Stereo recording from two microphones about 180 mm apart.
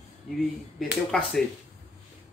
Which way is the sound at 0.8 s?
Centre (ahead or behind).